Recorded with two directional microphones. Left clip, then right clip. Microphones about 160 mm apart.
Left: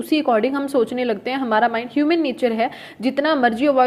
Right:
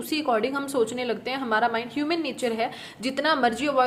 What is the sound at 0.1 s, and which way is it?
A woman's voice, 30° left (ahead or behind).